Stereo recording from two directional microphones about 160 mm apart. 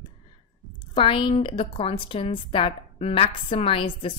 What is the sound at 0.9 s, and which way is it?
A woman's voice, 30° left (ahead or behind).